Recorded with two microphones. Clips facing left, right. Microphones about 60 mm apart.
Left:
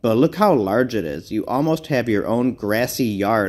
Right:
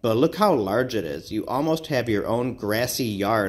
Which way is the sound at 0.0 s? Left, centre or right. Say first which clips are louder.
Left 4 dB; left.